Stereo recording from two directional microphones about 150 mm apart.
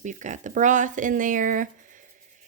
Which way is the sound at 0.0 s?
55° right (ahead or behind).